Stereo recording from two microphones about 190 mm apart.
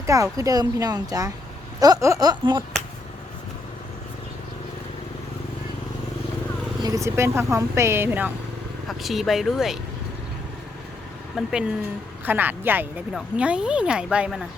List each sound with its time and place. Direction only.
0.0 s speech: 15° right (ahead or behind)
6.8 s speech: 15° right (ahead or behind)
8.9 s speech: centre (ahead or behind)
11.3 s speech: 5° right (ahead or behind)